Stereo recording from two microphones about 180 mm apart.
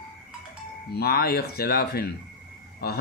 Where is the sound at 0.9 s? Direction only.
60° left (ahead or behind).